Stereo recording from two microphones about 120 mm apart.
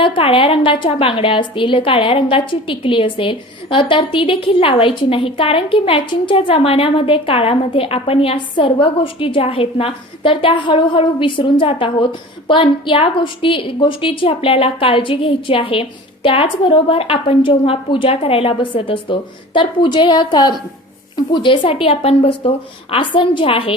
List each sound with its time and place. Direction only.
0.0 s a woman's voice: 45° left (ahead or behind)